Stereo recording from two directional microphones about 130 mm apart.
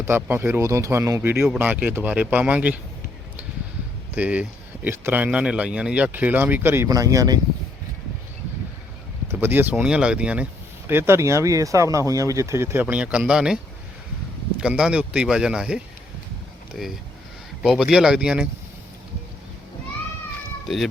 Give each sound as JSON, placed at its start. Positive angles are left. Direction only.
{"t": 0.0, "sound": "speech", "side_deg": -15}
{"t": 4.1, "sound": "speech", "side_deg": -10}
{"t": 6.8, "sound": "speech", "side_deg": -25}
{"t": 9.3, "sound": "speech", "side_deg": -15}
{"t": 14.6, "sound": "speech", "side_deg": -5}